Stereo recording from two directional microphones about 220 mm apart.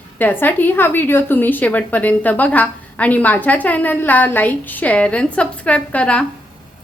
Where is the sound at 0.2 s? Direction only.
10° left (ahead or behind).